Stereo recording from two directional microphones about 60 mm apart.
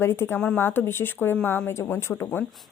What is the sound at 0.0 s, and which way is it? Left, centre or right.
Speech, left.